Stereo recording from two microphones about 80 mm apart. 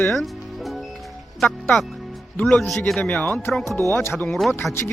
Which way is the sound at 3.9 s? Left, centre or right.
Left.